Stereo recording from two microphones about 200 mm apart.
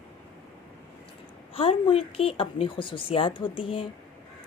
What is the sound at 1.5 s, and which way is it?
Speech, 25° left (ahead or behind).